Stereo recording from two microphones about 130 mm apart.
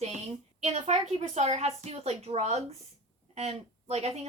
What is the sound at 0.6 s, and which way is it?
A woman's voice, 60° right (ahead or behind).